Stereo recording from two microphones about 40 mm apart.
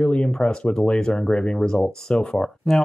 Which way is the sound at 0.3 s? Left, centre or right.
Left.